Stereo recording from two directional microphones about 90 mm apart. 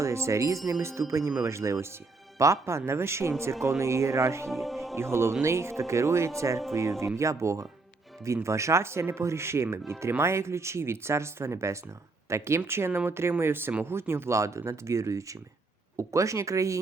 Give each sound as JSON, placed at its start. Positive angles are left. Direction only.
{"t": 0.0, "sound": "speech", "side_deg": -30}
{"t": 4.5, "sound": "music", "side_deg": 0}
{"t": 4.9, "sound": "speech", "side_deg": -30}